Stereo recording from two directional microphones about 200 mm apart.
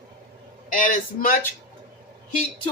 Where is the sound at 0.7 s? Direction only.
40° left (ahead or behind).